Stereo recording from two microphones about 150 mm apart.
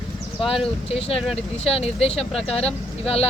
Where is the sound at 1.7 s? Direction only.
40° left (ahead or behind).